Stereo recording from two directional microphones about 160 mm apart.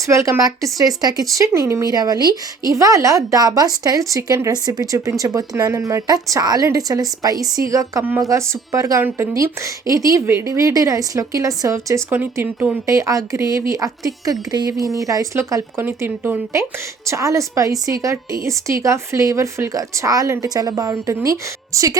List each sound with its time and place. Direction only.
0.1 s a woman's voice: 20° right (ahead or behind)